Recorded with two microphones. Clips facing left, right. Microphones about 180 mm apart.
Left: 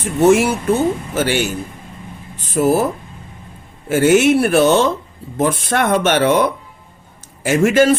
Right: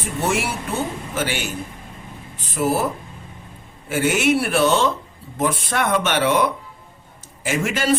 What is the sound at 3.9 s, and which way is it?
Speech, 45° left (ahead or behind).